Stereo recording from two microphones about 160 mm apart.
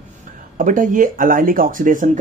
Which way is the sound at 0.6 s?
55° right (ahead or behind).